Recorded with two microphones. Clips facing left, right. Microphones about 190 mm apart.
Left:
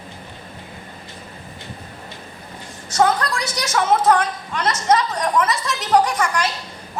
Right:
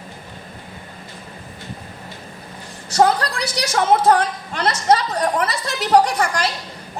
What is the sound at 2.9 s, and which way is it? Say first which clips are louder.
A woman's voice: right 2 dB; 30° right (ahead or behind).